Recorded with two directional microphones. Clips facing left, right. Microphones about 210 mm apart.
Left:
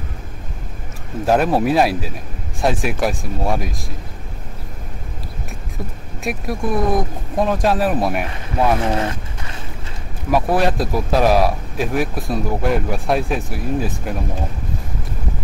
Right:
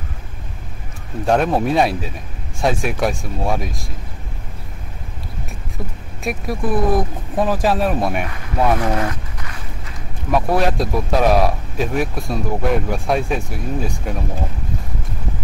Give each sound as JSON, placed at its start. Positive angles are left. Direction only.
{"t": 1.2, "sound": "speech", "side_deg": 5}
{"t": 6.2, "sound": "speech", "side_deg": 0}
{"t": 8.8, "sound": "a sound", "side_deg": 25}
{"t": 10.3, "sound": "speech", "side_deg": 0}